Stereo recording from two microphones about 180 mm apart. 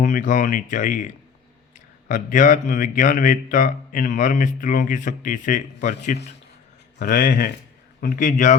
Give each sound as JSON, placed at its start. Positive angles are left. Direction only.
{"t": 0.0, "sound": "speech", "side_deg": 45}